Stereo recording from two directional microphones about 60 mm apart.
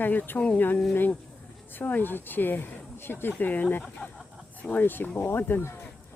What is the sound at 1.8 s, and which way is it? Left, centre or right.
Speech, left.